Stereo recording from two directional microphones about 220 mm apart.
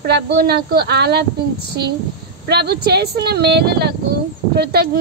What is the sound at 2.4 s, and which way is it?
A woman's voice, 45° right (ahead or behind).